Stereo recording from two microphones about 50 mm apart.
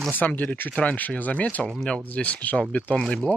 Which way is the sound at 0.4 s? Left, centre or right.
Left.